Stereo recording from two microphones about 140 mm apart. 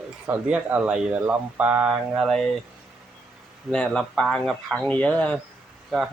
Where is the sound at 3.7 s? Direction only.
5° left (ahead or behind).